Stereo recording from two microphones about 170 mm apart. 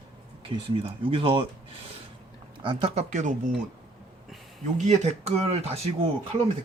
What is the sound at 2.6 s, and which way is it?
Speech, 30° right (ahead or behind).